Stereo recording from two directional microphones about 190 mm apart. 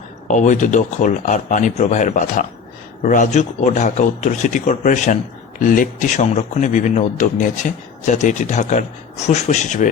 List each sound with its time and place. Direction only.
0.3 s speech: 40° left (ahead or behind)